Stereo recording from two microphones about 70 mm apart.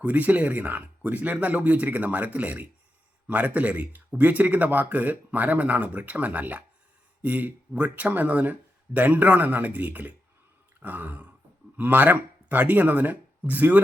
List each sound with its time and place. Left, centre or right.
0.0 s speech: right